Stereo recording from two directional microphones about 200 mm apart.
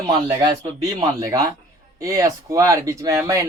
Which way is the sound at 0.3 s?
20° right (ahead or behind).